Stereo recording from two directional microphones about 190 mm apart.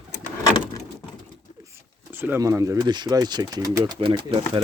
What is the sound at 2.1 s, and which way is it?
Speech, 10° right (ahead or behind).